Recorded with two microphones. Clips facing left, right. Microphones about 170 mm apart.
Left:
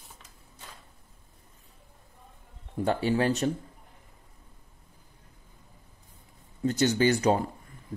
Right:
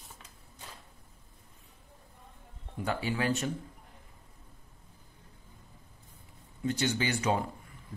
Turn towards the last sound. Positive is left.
turn(degrees=40)  # may be behind; listen again after turning